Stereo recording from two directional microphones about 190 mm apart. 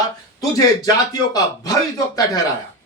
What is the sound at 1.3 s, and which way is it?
Speech, 20° left (ahead or behind).